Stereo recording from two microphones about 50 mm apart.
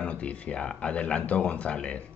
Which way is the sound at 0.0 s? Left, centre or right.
Left.